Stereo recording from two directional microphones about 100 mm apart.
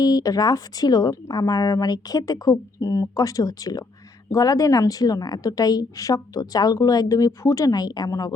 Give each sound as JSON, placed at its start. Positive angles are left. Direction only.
{"t": 0.0, "sound": "a woman's voice", "side_deg": 40}